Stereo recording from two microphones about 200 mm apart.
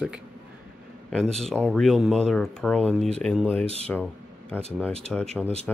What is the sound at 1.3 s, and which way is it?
Speech, centre (ahead or behind).